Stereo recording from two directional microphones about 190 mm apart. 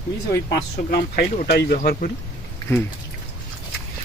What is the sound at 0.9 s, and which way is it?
Speech, 55° left (ahead or behind).